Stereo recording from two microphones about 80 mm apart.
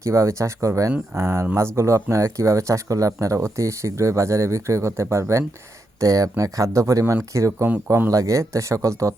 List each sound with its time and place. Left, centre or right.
0.0 s speech: right